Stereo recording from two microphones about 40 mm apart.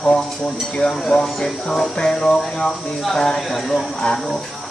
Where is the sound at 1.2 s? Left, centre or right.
Centre.